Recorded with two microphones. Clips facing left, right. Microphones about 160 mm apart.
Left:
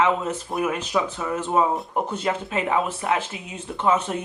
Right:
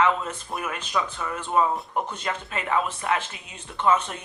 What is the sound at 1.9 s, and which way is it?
Speech, 10° left (ahead or behind).